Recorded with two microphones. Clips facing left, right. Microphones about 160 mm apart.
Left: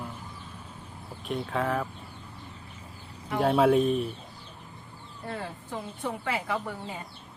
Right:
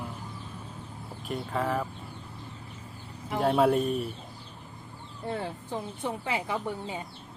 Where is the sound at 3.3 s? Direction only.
Centre (ahead or behind).